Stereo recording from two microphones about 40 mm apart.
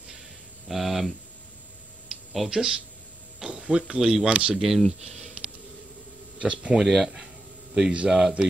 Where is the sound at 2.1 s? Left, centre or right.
Centre.